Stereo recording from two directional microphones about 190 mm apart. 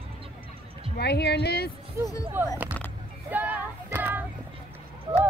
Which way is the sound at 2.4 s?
10° right (ahead or behind).